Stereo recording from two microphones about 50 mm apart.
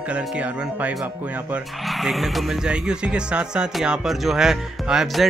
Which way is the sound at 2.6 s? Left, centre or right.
Centre.